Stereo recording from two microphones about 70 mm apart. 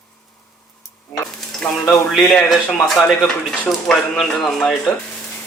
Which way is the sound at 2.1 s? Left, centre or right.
Centre.